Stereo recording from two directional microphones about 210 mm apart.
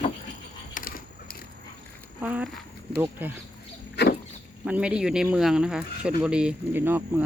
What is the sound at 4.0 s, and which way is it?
Vehicle, 50° left (ahead or behind).